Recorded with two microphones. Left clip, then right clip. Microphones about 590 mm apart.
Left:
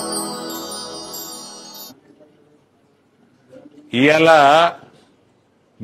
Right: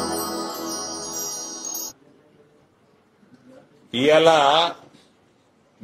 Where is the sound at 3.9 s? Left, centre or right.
Left.